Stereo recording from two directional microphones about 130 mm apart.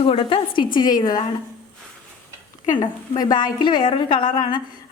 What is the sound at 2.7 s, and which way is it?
A woman's voice, 30° left (ahead or behind).